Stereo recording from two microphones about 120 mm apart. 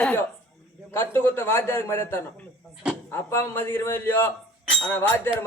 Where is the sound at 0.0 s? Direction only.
10° left (ahead or behind).